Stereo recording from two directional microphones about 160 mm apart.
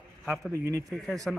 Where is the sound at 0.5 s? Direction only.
20° right (ahead or behind).